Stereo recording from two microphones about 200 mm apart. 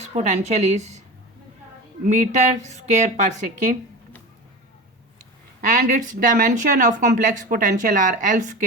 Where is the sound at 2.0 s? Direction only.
35° right (ahead or behind).